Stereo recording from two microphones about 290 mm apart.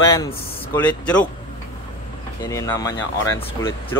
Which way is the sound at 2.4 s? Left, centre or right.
Centre.